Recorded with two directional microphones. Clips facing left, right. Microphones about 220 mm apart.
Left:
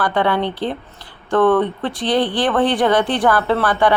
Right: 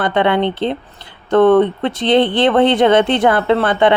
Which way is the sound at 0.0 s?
20° right (ahead or behind).